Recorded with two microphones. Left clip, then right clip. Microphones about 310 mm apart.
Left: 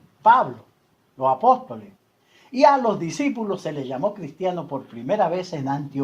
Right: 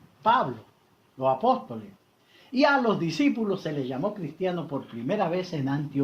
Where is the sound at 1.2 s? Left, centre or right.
Left.